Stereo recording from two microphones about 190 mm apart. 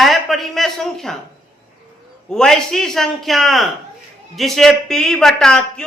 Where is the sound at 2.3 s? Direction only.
5° left (ahead or behind).